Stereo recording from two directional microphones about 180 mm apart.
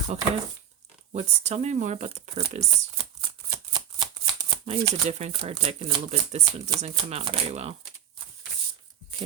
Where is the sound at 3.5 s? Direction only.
25° right (ahead or behind).